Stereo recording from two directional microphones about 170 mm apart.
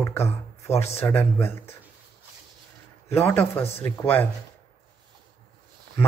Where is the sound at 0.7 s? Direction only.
40° left (ahead or behind).